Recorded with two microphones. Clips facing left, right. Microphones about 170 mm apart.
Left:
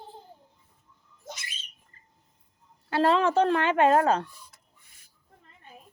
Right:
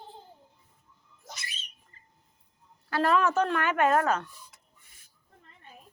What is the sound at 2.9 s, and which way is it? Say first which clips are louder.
Speech: left 2 dB; 25° left (ahead or behind).